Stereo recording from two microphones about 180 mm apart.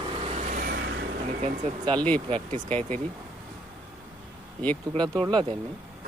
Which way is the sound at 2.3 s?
40° right (ahead or behind).